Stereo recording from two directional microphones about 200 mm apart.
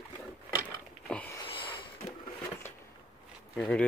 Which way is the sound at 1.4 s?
25° left (ahead or behind).